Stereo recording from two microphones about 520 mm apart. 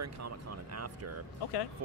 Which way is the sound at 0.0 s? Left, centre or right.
Right.